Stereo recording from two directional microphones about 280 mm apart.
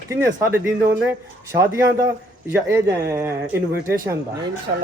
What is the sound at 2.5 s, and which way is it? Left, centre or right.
A man's voice, centre.